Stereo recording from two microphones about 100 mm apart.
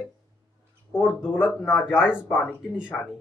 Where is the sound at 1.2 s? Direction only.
10° right (ahead or behind).